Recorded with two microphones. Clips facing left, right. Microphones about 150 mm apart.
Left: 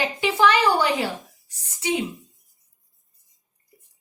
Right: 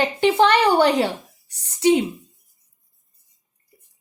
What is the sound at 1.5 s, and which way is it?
Speech, 70° right (ahead or behind).